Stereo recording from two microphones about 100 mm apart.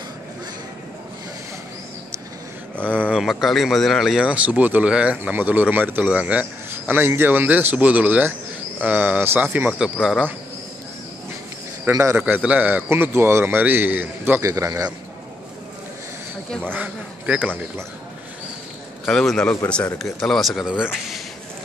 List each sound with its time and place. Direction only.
3.0 s speech: 5° right (ahead or behind)
11.9 s a man's voice: 30° right (ahead or behind)
12.2 s a man's voice: 15° right (ahead or behind)
14.4 s a man's voice: 30° right (ahead or behind)
16.6 s speech: 15° right (ahead or behind)
19.0 s a man's voice: 5° left (ahead or behind)